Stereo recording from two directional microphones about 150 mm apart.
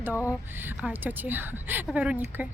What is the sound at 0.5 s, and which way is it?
A woman's voice, 15° right (ahead or behind).